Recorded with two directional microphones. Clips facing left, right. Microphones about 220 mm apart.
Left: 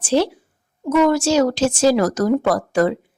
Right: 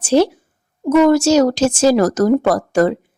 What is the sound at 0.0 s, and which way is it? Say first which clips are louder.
A woman's voice: right 4 dB; 45° right (ahead or behind).